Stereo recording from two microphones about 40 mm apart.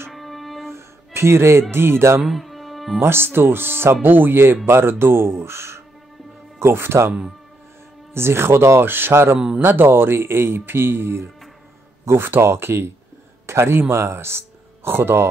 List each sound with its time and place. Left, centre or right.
0.1 s music: centre
1.1 s speech: right
2.2 s music: centre
3.0 s speech: right
4.6 s speech: right
8.1 s speech: right
14.9 s speech: right